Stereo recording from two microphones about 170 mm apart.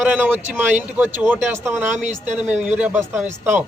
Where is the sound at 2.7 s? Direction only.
10° right (ahead or behind).